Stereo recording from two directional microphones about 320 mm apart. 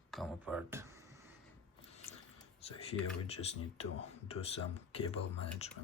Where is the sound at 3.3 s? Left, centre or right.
Centre.